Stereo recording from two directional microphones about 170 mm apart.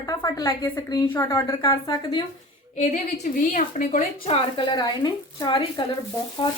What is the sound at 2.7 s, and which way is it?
A woman's voice, 40° left (ahead or behind).